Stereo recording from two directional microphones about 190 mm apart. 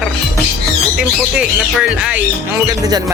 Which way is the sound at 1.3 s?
5° right (ahead or behind).